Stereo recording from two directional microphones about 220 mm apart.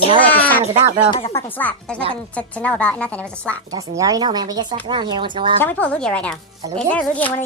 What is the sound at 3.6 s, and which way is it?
Speech, 15° right (ahead or behind).